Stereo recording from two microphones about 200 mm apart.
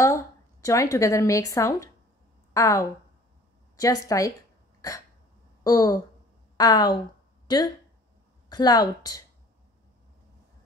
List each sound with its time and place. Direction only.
0.0 s speech: 15° left (ahead or behind)
4.8 s hiccup: 20° left (ahead or behind)
5.6 s a woman's voice: 20° left (ahead or behind)